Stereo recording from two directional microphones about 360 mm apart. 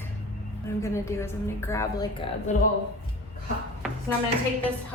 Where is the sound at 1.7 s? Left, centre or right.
Centre.